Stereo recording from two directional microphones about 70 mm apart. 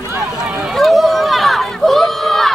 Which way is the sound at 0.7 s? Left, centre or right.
Centre.